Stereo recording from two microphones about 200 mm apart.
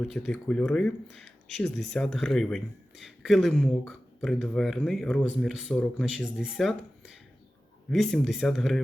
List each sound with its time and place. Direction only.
0.0 s speech: 5° left (ahead or behind)